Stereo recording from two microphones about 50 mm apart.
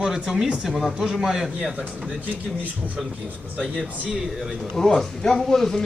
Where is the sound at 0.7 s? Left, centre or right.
Centre.